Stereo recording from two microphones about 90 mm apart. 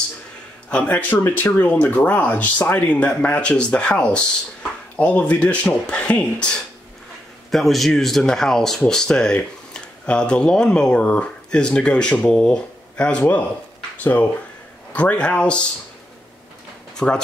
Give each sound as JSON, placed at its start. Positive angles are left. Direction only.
{"t": 0.7, "sound": "speech", "side_deg": 15}
{"t": 7.5, "sound": "speech", "side_deg": 0}
{"t": 14.9, "sound": "speech", "side_deg": 15}
{"t": 16.9, "sound": "speech", "side_deg": 10}